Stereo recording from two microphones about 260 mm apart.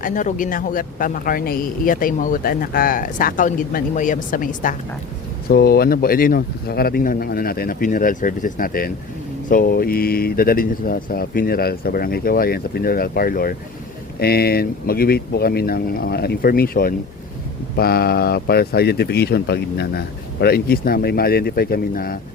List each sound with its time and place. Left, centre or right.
0.0 s a man's voice: left